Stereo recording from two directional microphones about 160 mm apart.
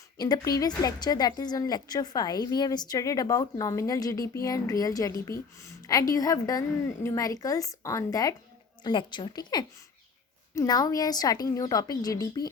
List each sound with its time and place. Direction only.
0.2 s a woman's voice: 25° left (ahead or behind)